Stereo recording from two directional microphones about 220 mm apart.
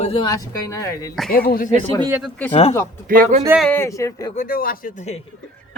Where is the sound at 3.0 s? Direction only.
40° right (ahead or behind).